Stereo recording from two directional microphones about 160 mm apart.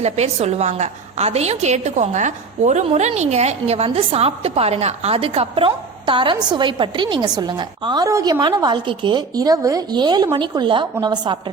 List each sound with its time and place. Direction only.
0.0 s a woman's voice: 40° right (ahead or behind); by 11.3 s 25° right (ahead or behind)